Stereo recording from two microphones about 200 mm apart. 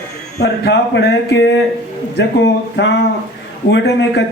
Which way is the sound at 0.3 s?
55° left (ahead or behind).